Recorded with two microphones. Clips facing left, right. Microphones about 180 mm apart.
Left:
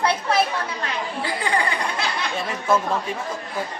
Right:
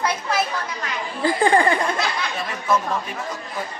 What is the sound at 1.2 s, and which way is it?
Speech, 50° right (ahead or behind).